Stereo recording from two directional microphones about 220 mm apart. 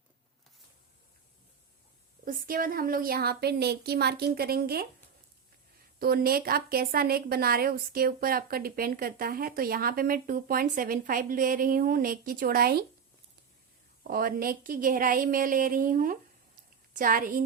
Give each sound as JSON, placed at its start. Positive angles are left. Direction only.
{"t": 2.2, "sound": "a woman's voice", "side_deg": -40}
{"t": 6.0, "sound": "speech", "side_deg": -45}
{"t": 14.1, "sound": "speech", "side_deg": -40}